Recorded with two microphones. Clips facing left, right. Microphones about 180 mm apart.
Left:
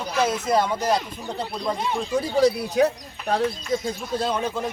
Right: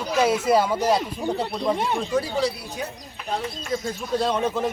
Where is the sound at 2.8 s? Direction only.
80° left.